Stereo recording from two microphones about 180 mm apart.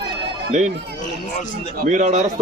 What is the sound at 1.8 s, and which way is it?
Speech, 40° right (ahead or behind).